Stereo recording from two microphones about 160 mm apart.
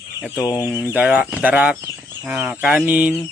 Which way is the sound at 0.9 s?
10° right (ahead or behind).